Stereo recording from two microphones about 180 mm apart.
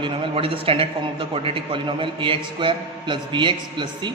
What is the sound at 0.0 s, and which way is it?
A man's voice, 30° right (ahead or behind).